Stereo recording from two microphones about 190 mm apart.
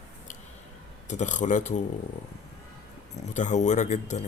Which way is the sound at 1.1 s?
40° left (ahead or behind).